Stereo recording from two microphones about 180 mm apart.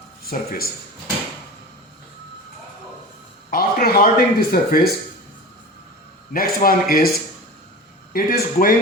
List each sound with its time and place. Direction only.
0.3 s speech: 60° left (ahead or behind)
3.5 s speech: 55° left (ahead or behind)
6.3 s speech: 55° left (ahead or behind)
8.1 s speech: 55° left (ahead or behind)